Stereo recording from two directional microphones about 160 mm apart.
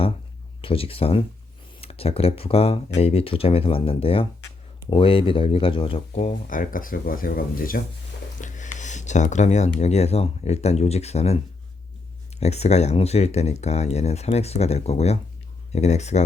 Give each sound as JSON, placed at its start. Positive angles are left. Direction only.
{"t": 0.6, "sound": "speech", "side_deg": 35}
{"t": 8.4, "sound": "speech", "side_deg": 50}
{"t": 12.4, "sound": "speech", "side_deg": 40}